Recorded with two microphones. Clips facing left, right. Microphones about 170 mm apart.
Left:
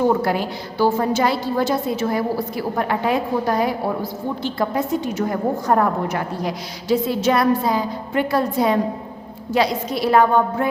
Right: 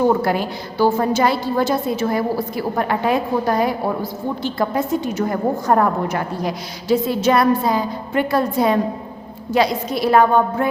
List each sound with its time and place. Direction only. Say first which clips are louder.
0.3 s a woman's voice: right 1 dB; 50° right (ahead or behind)